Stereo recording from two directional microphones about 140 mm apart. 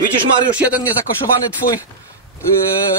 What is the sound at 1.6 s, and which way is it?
Speech, 90° left.